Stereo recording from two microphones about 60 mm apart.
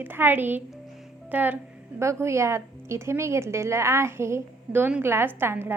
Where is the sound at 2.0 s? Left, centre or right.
Right.